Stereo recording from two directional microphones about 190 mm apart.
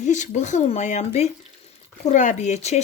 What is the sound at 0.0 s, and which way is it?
Speech, 40° left (ahead or behind).